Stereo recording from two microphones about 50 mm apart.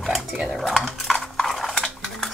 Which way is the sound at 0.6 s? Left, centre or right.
Centre.